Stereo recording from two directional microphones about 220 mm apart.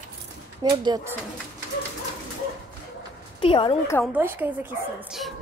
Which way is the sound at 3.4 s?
25° left (ahead or behind).